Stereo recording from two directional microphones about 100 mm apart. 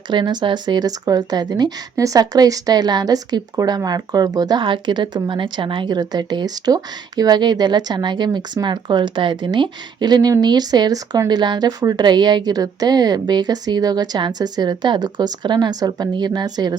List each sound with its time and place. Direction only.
0.1 s speech: 45° right (ahead or behind)
4.6 s a woman's voice: 55° right (ahead or behind)